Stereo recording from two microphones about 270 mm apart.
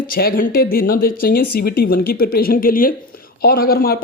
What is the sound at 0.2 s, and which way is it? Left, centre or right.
Speech, left.